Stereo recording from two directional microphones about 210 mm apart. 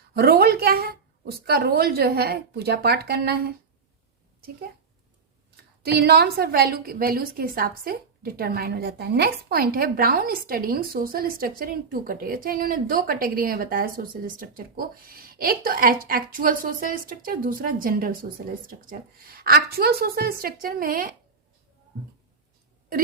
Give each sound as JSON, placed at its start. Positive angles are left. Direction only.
{"t": 0.1, "sound": "a woman's voice", "side_deg": -45}
{"t": 5.8, "sound": "a woman's voice", "side_deg": -50}